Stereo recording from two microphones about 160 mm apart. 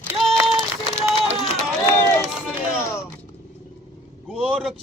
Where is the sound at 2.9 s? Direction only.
15° left (ahead or behind).